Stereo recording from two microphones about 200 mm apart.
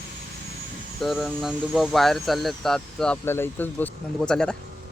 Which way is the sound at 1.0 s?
Centre (ahead or behind).